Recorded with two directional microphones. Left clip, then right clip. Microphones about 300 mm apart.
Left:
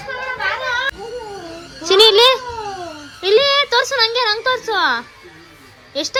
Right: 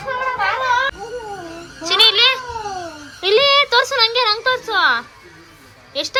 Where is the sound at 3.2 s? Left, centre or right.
Centre.